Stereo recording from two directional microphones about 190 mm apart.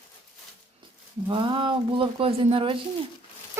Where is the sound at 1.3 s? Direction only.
25° right (ahead or behind).